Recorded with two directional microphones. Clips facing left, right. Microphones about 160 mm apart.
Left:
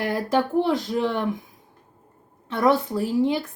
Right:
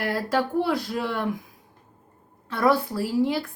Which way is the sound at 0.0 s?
20° left (ahead or behind).